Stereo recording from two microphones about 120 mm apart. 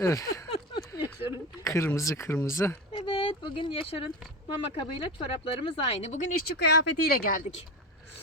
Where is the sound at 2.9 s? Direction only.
45° left (ahead or behind).